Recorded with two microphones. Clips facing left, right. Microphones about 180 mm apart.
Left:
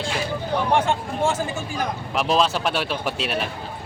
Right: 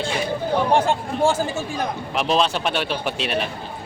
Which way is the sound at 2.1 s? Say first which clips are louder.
Even; centre (ahead or behind).